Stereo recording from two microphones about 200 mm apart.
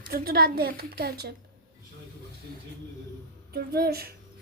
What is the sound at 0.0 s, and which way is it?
A woman's voice, 50° right (ahead or behind).